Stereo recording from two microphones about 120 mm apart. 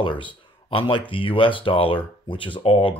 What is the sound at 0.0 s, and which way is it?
Speech, 45° left (ahead or behind).